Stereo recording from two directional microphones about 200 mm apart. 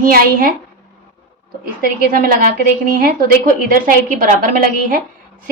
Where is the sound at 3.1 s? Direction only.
45° right (ahead or behind).